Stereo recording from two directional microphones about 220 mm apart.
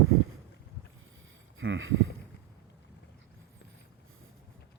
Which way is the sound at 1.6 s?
65° right (ahead or behind).